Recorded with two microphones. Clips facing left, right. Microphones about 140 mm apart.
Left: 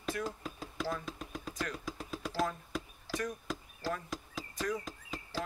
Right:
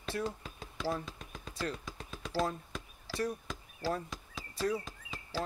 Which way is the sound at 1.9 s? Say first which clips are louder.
Left 4 dB; centre (ahead or behind).